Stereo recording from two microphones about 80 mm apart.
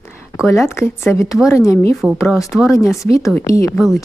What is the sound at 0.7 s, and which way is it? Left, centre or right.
Speech, left.